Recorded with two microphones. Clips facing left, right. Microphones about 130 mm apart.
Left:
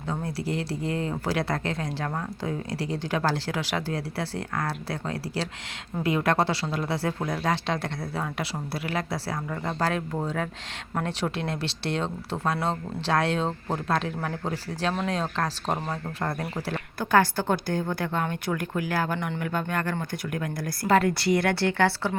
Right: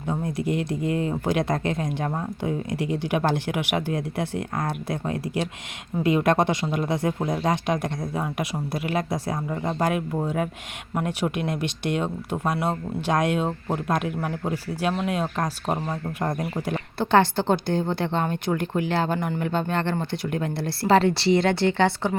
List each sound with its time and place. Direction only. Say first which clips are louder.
0.1 s speech: right 4 dB; 20° right (ahead or behind)
17.0 s speech: right 3 dB; 25° right (ahead or behind)